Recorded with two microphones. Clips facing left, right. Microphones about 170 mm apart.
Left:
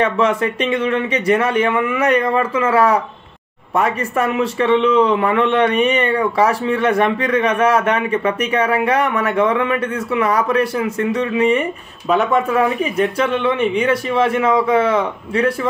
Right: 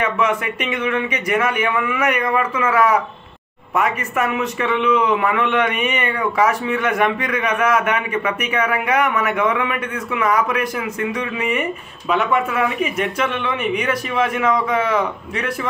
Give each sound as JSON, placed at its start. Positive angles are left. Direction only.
{"t": 0.0, "sound": "a man's voice", "side_deg": 30}